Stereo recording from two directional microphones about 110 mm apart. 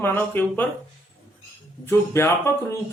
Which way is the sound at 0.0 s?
20° left (ahead or behind).